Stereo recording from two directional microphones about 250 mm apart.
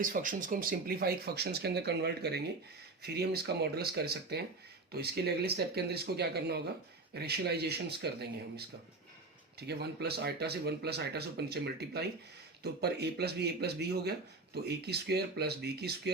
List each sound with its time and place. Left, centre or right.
0.0 s speech: right